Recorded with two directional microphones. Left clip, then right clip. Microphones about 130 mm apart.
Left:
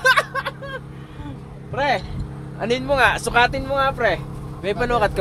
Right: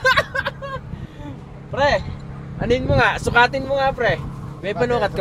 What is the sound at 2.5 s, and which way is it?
Speech, 35° left (ahead or behind).